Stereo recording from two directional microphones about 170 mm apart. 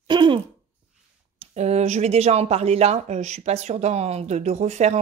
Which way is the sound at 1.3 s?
40° right (ahead or behind).